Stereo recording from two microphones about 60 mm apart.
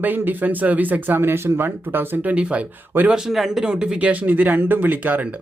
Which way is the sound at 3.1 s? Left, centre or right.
Centre.